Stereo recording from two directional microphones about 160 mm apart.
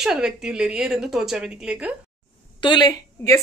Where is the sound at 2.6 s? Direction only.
30° left (ahead or behind).